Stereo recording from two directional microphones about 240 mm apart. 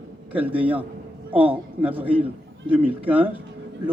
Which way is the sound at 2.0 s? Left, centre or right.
Right.